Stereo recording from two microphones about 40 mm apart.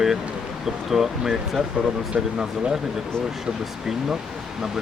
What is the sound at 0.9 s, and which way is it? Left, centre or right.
Speech, centre.